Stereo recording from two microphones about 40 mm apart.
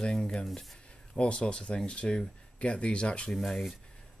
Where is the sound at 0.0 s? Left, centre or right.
Centre.